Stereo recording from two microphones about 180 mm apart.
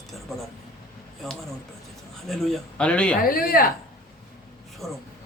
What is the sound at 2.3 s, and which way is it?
Speech, centre (ahead or behind).